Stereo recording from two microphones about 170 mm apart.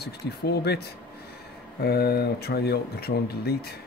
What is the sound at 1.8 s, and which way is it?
Speech, 70° left (ahead or behind).